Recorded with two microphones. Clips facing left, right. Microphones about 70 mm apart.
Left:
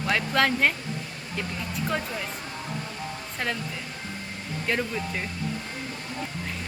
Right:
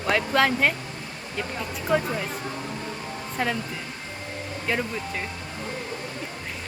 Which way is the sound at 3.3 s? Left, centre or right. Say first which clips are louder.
Right 4 dB; centre.